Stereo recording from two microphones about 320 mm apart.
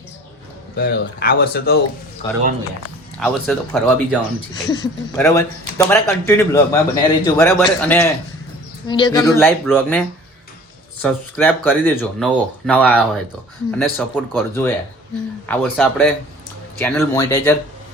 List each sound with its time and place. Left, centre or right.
0.8 s speech: left
3.2 s speech: centre
9.2 s speech: centre
11.0 s speech: centre